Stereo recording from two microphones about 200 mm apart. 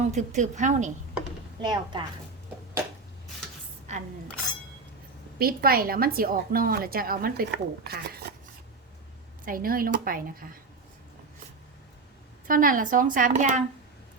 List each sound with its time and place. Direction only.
0.1 s a woman's voice: 35° right (ahead or behind)
1.6 s a woman's voice: 25° right (ahead or behind)
3.9 s speech: 35° right (ahead or behind)
5.4 s a woman's voice: 50° right (ahead or behind)
9.5 s a woman's voice: 45° right (ahead or behind)
12.5 s a woman's voice: 45° right (ahead or behind)